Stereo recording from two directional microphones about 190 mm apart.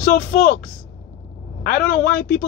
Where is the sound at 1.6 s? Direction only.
50° left (ahead or behind).